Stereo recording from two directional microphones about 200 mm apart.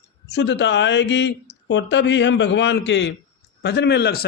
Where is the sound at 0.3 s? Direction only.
60° left (ahead or behind).